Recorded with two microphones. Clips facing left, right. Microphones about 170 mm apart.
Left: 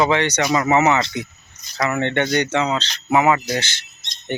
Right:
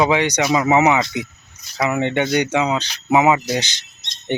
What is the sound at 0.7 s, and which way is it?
Speech, 15° right (ahead or behind).